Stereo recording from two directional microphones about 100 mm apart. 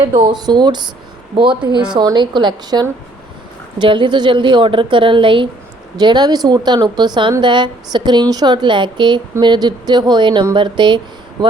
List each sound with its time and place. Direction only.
0.1 s a woman's voice: 50° right (ahead or behind)
6.0 s a woman's voice: 45° right (ahead or behind)